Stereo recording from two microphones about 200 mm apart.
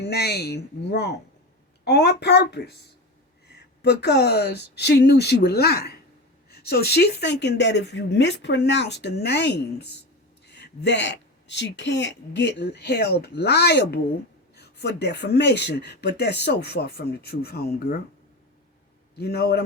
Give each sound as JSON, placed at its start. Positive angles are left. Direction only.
{"t": 0.0, "sound": "a woman's voice", "side_deg": 55}
{"t": 19.1, "sound": "speech", "side_deg": 55}